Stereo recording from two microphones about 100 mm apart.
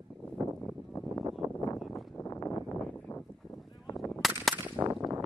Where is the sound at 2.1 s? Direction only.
30° left (ahead or behind).